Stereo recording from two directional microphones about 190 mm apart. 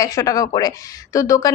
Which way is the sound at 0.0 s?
20° left (ahead or behind).